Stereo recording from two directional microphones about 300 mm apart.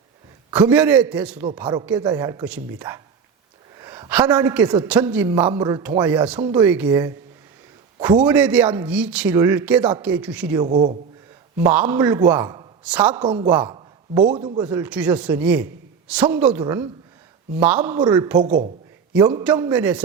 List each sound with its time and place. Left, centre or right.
0.5 s a man's voice: centre
11.5 s speech: centre
13.2 s speech: centre
14.6 s a man's voice: centre
18.3 s speech: right
19.1 s speech: centre